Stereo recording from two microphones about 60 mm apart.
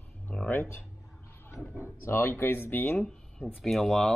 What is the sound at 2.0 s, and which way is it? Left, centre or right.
Speech, left.